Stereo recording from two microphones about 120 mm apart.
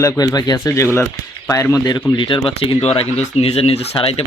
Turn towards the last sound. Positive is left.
turn(degrees=55)  # may be behind; listen again after turning